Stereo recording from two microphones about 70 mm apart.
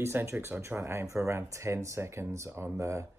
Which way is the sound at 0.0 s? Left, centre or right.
Right.